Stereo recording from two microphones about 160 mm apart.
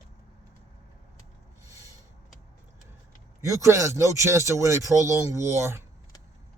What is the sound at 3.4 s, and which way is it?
A man's voice, 20° right (ahead or behind).